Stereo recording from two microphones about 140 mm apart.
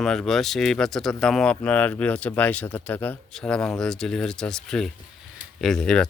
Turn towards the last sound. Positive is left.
turn(degrees=5)  # may be behind; listen again after turning